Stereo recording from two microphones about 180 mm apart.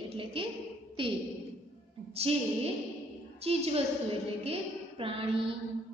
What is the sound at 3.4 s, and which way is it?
Speech, 35° right (ahead or behind).